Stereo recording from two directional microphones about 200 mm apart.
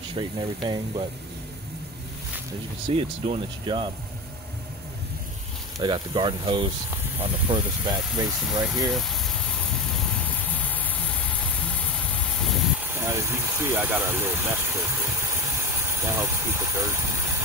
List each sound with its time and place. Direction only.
0.1 s speech: 25° right (ahead or behind)
3.0 s speech: 25° right (ahead or behind)
5.8 s speech: 20° right (ahead or behind)
8.6 s vehicle: centre (ahead or behind)
12.8 s speech: 10° right (ahead or behind)